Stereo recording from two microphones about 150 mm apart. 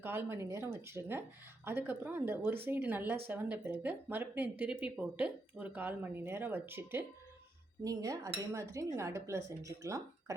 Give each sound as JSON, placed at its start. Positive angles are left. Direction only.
{"t": 0.0, "sound": "speech", "side_deg": -15}